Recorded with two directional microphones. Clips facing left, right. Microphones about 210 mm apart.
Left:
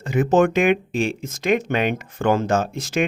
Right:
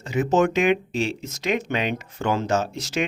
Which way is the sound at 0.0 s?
55° left (ahead or behind).